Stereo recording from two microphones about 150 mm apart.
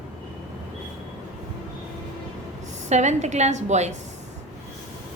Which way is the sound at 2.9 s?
50° right (ahead or behind).